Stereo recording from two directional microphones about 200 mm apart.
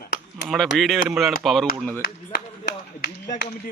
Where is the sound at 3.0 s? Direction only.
50° left (ahead or behind).